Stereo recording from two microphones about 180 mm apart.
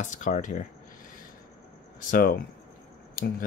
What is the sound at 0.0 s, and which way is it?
Speech, 45° left (ahead or behind).